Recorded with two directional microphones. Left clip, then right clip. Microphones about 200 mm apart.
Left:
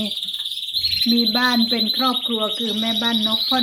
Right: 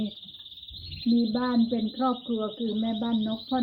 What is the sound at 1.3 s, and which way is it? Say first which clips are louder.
Speech: left 9 dB; 15° left (ahead or behind).